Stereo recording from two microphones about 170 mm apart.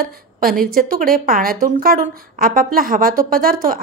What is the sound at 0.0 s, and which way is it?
A woman's voice, 60° right (ahead or behind).